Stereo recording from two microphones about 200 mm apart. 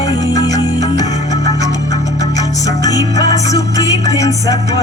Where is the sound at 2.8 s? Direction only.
20° left (ahead or behind).